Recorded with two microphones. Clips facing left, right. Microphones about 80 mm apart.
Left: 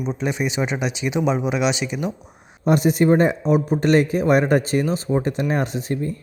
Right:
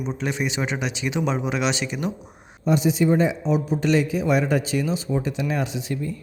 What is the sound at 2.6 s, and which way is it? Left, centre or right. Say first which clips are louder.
Speech: left 3 dB; left.